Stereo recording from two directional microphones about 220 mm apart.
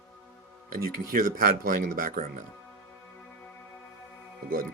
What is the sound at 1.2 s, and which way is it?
Speech, 40° right (ahead or behind).